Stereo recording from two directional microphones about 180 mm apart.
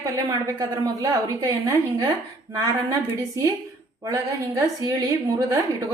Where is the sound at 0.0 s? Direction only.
20° right (ahead or behind).